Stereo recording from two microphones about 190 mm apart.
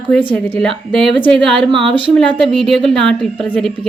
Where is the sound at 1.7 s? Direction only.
30° right (ahead or behind).